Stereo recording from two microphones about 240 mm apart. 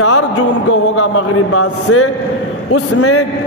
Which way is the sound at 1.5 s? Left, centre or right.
Left.